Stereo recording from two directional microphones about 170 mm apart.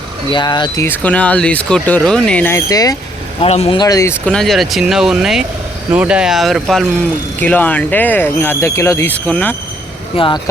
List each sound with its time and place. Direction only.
0.3 s speech: 25° left (ahead or behind)
0.9 s speech: 10° left (ahead or behind)
3.4 s speech: 35° left (ahead or behind); by 4.2 s 15° left (ahead or behind)
4.3 s speech: centre (ahead or behind)
10.2 s speech: 30° left (ahead or behind)